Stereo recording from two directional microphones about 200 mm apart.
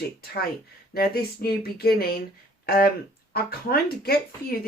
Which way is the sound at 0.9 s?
50° left (ahead or behind).